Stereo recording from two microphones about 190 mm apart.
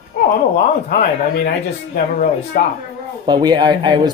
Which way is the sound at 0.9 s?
50° left (ahead or behind).